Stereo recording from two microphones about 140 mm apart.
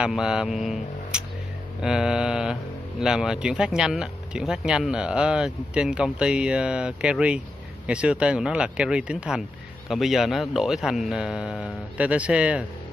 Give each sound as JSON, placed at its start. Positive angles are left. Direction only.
{"t": 0.0, "sound": "a man's voice", "side_deg": -5}